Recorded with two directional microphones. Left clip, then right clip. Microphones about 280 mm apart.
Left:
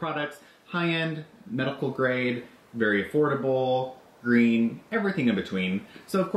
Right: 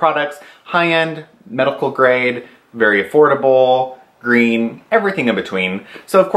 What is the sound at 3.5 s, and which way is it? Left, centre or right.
Speech, centre.